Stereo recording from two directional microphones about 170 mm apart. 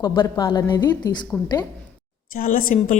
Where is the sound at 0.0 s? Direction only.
25° left (ahead or behind).